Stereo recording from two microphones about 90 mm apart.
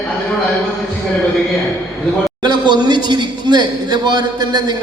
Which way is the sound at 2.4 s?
55° right (ahead or behind).